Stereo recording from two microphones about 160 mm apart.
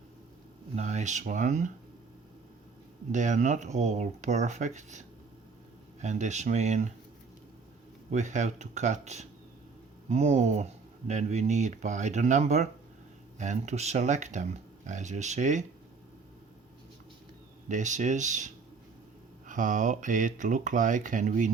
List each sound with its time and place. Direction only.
0.8 s speech: 45° right (ahead or behind)
3.1 s speech: 50° right (ahead or behind)
8.1 s speech: 50° right (ahead or behind)
17.7 s speech: 50° right (ahead or behind)